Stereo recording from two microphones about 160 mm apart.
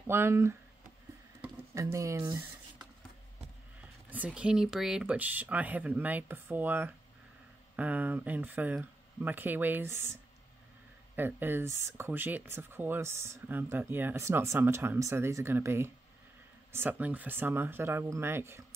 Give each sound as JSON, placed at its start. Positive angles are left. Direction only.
{"t": 0.0, "sound": "speech", "side_deg": -15}
{"t": 1.8, "sound": "speech", "side_deg": -20}
{"t": 4.1, "sound": "speech", "side_deg": -10}
{"t": 11.1, "sound": "speech", "side_deg": -15}